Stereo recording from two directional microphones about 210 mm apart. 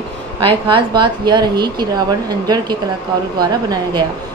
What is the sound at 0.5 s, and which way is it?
A woman's voice, 25° right (ahead or behind).